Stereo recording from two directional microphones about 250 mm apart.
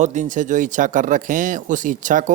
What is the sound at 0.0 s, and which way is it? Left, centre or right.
Speech, right.